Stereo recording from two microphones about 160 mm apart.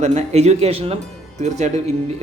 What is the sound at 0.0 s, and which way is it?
A man's voice, 45° right (ahead or behind).